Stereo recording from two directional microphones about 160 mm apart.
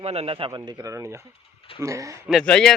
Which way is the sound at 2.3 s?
5° left (ahead or behind).